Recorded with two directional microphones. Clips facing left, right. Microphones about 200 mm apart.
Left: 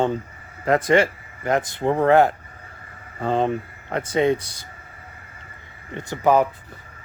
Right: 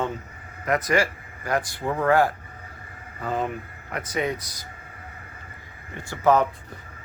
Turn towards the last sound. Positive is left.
turn(degrees=15)  # may be behind; listen again after turning